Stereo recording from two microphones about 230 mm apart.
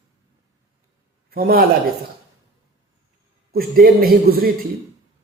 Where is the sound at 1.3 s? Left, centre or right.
Right.